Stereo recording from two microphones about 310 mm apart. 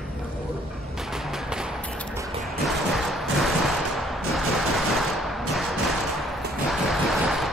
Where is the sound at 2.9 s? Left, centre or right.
Centre.